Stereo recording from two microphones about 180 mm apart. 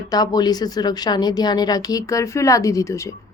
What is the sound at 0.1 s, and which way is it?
A woman's voice, 20° left (ahead or behind).